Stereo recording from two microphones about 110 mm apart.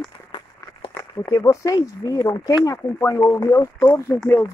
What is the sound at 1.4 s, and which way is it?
Speech, 30° left (ahead or behind).